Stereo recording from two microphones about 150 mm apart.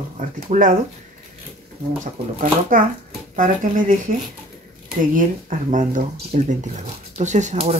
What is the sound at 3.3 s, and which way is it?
Speech, 60° right (ahead or behind).